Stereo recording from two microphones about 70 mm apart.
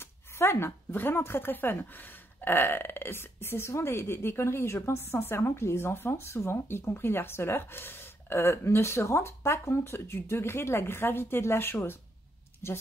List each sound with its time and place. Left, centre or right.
0.0 s speech: left